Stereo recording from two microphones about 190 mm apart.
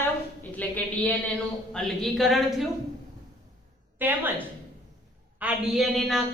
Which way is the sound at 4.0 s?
10° right (ahead or behind).